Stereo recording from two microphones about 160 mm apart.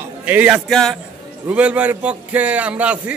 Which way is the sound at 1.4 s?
10° right (ahead or behind).